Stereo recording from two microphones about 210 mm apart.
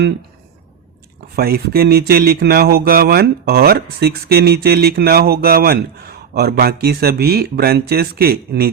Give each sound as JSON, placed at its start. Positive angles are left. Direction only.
{"t": 1.4, "sound": "speech", "side_deg": -45}